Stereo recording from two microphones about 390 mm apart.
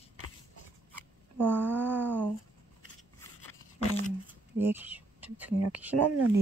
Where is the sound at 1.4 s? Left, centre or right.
Centre.